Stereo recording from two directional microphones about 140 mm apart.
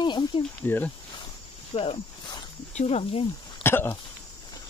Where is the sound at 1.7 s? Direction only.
40° left (ahead or behind).